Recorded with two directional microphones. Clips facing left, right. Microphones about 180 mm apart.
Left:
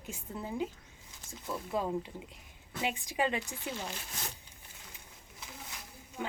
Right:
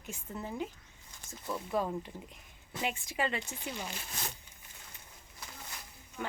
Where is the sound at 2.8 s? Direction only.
15° left (ahead or behind).